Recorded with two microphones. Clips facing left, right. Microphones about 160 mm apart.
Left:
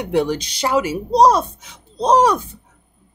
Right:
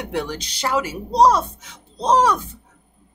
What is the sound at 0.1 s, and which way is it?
A woman's voice, 15° left (ahead or behind).